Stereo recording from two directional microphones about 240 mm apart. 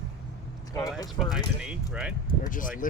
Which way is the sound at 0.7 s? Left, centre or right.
Centre.